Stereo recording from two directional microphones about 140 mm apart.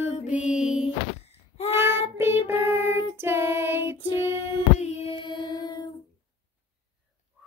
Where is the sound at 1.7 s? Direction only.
15° right (ahead or behind).